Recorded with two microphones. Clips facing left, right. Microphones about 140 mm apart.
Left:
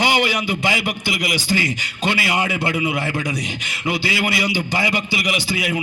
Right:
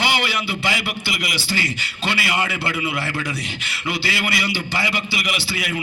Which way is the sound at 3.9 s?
20° left (ahead or behind).